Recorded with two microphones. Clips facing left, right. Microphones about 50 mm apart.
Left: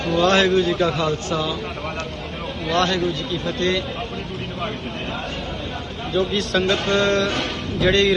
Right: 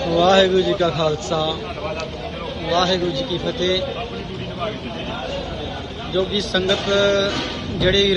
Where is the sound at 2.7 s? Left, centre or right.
Left.